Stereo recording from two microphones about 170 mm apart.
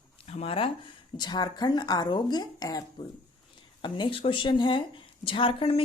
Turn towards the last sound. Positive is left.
turn(degrees=30)  # may be behind; listen again after turning